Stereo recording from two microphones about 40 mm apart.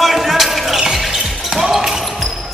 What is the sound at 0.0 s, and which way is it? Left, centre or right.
Basketball bounce, centre.